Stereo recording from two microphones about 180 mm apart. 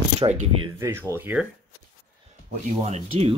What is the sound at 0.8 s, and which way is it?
Speech, 15° right (ahead or behind).